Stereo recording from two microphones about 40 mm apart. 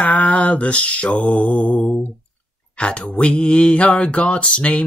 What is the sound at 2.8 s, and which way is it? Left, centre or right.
Mantra, left.